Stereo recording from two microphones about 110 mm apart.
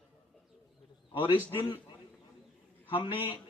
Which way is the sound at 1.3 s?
50° left (ahead or behind).